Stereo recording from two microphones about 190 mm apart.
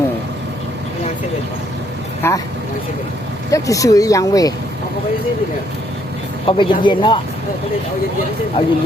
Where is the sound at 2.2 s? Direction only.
15° left (ahead or behind).